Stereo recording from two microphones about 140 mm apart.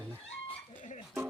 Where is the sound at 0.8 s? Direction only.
60° left (ahead or behind).